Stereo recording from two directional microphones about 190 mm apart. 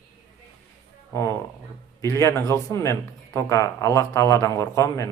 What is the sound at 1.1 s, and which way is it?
Speech, 15° left (ahead or behind).